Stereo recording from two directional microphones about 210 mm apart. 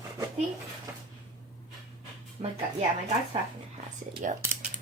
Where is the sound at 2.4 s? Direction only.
30° right (ahead or behind).